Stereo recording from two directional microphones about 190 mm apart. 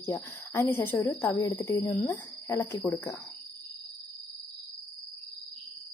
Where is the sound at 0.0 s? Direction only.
15° left (ahead or behind).